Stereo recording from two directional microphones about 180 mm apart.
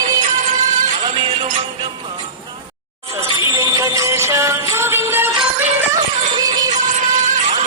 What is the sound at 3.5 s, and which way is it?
Music, 20° right (ahead or behind).